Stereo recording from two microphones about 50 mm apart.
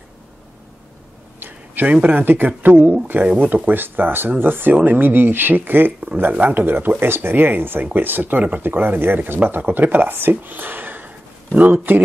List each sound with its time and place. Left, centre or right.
1.9 s speech: right
2.2 s speech: right